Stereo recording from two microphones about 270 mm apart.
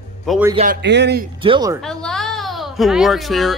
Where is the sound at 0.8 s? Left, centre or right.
Right.